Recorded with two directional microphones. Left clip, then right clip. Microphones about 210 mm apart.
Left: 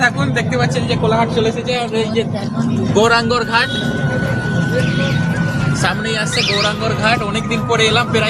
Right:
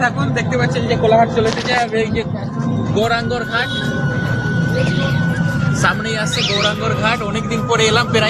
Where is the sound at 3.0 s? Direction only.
40° left (ahead or behind).